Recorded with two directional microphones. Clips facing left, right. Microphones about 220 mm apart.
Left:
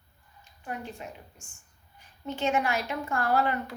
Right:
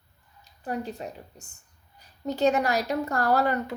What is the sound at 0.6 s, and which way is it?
A woman's voice, 35° right (ahead or behind).